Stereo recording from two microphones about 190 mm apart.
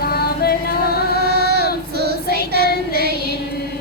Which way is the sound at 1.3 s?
60° right (ahead or behind).